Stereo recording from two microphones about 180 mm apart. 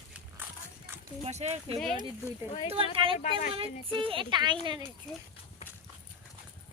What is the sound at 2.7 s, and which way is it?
Speech, 30° right (ahead or behind).